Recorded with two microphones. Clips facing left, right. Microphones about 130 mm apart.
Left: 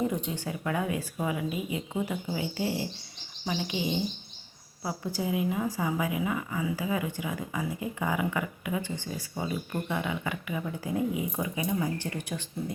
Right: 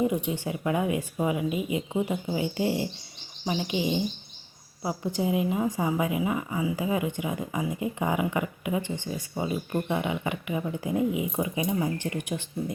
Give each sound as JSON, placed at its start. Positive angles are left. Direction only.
{"t": 0.0, "sound": "a woman's voice", "side_deg": -15}